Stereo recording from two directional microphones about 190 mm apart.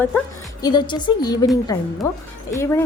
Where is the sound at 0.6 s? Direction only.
20° left (ahead or behind).